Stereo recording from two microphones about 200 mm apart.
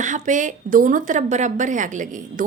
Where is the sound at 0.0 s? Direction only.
40° right (ahead or behind).